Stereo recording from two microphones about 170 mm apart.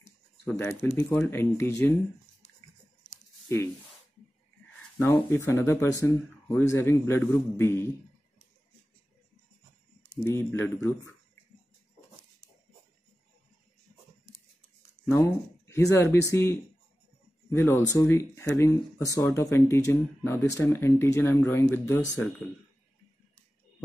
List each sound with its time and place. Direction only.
0.5 s speech: 15° left (ahead or behind)
5.3 s speech: 15° left (ahead or behind)
10.0 s speech: 15° left (ahead or behind)
15.0 s speech: 15° left (ahead or behind)